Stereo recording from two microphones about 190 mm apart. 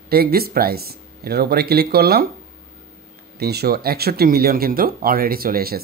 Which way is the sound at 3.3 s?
55° right (ahead or behind).